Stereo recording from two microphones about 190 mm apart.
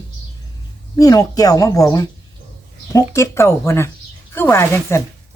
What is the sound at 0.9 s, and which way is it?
Speech, 20° left (ahead or behind).